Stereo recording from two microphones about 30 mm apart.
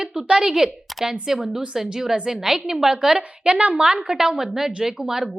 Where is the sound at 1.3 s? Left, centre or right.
Centre.